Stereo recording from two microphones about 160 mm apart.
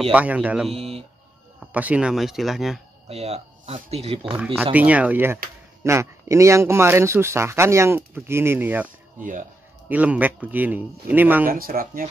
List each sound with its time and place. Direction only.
0.1 s speech: 10° right (ahead or behind)
0.7 s speech: 40° right (ahead or behind)
1.6 s speech: 10° right (ahead or behind)
3.1 s speech: 40° right (ahead or behind)
4.7 s speech: 10° right (ahead or behind)
9.2 s speech: 55° right (ahead or behind)
9.8 s speech: 10° right (ahead or behind)
11.4 s speech: 65° right (ahead or behind)